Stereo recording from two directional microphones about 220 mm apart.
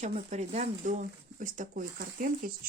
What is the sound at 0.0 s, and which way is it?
Speech, 30° right (ahead or behind).